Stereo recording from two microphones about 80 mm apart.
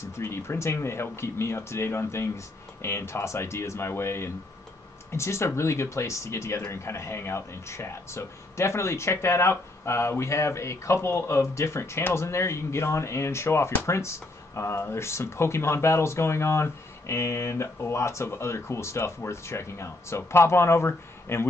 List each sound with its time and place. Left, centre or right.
0.2 s speech: left